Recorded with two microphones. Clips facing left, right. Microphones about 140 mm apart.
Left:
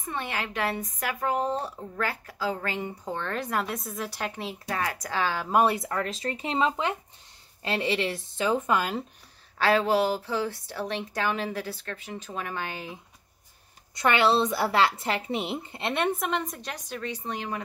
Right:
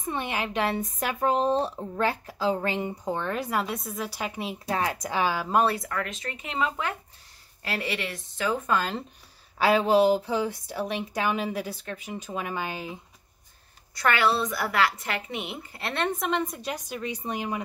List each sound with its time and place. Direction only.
0.1 s speech: 20° right (ahead or behind); by 4.3 s centre (ahead or behind)
4.6 s speech: 25° right (ahead or behind)
5.5 s speech: 10° left (ahead or behind)
5.8 s a woman's voice: 30° left (ahead or behind)
8.6 s speech: 10° left (ahead or behind)
9.6 s speech: 15° right (ahead or behind)
13.9 s a woman's voice: 20° left (ahead or behind)
16.1 s speech: centre (ahead or behind)